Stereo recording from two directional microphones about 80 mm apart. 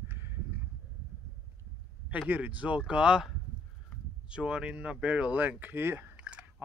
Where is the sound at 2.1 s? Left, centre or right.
Centre.